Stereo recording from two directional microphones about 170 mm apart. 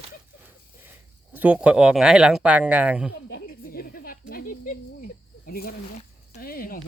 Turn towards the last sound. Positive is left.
turn(degrees=60)  # may be behind; listen again after turning